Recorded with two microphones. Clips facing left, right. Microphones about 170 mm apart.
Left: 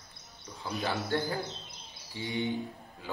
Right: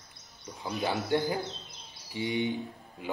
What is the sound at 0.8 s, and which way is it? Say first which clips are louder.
A man's voice: right 3 dB; 20° right (ahead or behind).